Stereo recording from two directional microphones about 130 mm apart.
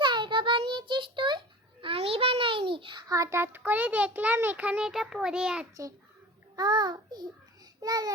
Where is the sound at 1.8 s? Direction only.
45° right (ahead or behind).